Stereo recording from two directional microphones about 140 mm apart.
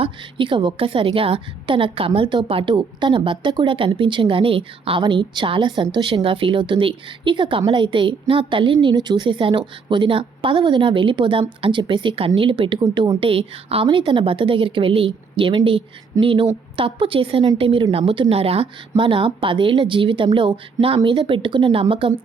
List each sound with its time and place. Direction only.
0.0 s a woman's voice: 35° right (ahead or behind)